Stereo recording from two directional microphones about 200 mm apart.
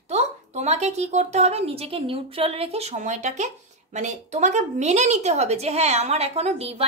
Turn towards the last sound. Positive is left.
turn(degrees=-30)  # may be behind; listen again after turning